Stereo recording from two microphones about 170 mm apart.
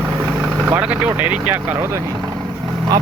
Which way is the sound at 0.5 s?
10° right (ahead or behind).